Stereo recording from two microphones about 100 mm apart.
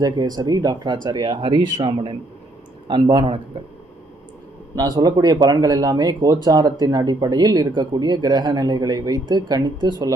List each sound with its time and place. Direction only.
0.0 s speech: 40° right (ahead or behind); by 2.1 s 60° right (ahead or behind)
2.8 s speech: 50° right (ahead or behind)
4.8 s speech: 40° right (ahead or behind)